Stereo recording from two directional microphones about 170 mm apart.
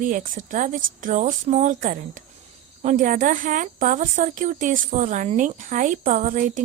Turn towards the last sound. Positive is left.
turn(degrees=-50)  # may be behind; listen again after turning